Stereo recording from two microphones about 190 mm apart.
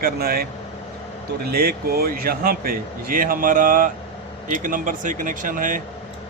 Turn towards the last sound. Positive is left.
turn(degrees=-45)  # may be behind; listen again after turning